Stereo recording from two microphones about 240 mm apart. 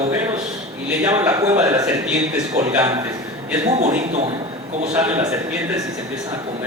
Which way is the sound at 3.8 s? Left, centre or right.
Right.